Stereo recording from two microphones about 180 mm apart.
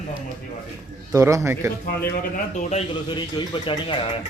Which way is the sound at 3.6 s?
30° left (ahead or behind).